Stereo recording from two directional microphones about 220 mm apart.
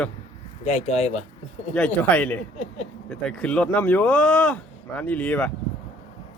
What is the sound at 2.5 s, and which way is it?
Speech, 30° left (ahead or behind).